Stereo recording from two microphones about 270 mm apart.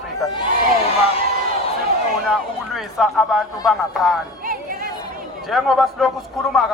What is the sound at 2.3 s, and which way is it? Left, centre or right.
A man's voice, centre.